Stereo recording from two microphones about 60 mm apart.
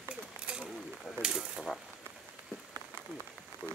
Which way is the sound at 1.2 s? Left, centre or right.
Centre.